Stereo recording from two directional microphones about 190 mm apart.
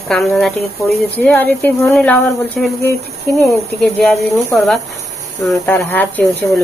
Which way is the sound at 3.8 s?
5° left (ahead or behind).